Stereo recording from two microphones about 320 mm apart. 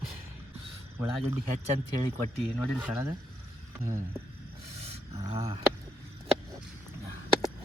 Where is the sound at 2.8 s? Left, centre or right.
Centre.